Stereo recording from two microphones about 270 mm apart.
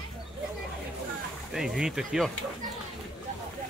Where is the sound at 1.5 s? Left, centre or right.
Centre.